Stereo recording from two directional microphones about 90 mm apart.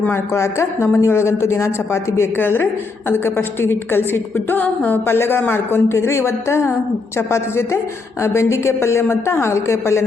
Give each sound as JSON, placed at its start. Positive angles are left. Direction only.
{"t": 0.0, "sound": "a woman's voice", "side_deg": 30}